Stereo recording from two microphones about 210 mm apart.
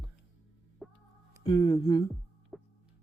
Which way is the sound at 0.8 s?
Centre (ahead or behind).